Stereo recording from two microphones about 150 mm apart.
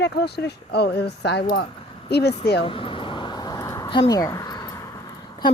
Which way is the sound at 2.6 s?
35° left (ahead or behind).